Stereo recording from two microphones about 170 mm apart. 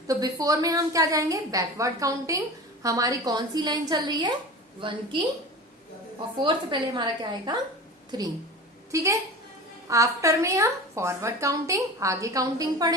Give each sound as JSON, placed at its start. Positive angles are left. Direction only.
{"t": 0.1, "sound": "a woman's voice", "side_deg": -20}
{"t": 6.4, "sound": "a woman's voice", "side_deg": -30}